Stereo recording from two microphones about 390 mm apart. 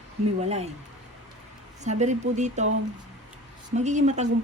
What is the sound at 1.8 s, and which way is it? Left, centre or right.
Speech, centre.